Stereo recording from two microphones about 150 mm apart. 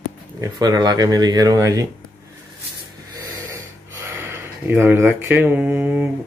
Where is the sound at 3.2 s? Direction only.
20° right (ahead or behind).